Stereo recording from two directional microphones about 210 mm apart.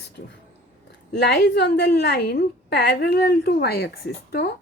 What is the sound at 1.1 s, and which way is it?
A woman's voice, 50° left (ahead or behind).